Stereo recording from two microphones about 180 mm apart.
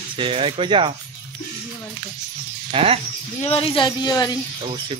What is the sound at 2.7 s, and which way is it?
Speech, 30° right (ahead or behind).